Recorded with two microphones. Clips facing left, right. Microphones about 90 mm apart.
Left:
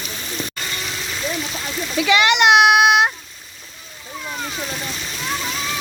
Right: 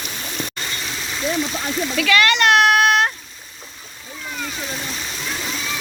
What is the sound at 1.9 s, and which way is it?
A child's voice, 20° left (ahead or behind).